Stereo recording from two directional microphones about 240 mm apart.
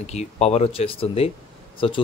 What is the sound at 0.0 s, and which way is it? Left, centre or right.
Speech, left.